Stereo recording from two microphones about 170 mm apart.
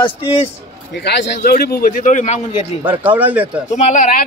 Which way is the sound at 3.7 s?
45° left (ahead or behind).